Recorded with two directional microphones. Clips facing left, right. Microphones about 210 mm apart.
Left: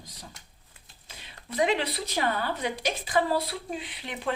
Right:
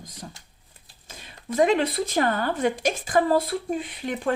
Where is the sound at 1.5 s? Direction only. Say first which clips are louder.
Right 6 dB; 45° right (ahead or behind).